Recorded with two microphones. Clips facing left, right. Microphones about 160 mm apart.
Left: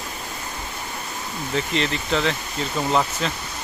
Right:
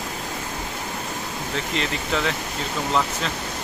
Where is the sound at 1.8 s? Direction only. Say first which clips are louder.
Left 1 dB; 5° right (ahead or behind).